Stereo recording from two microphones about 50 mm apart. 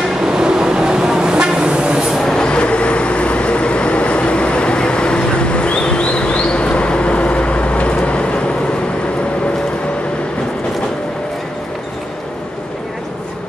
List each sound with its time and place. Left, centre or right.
0.2 s vehicle: centre
2.2 s vehicle: centre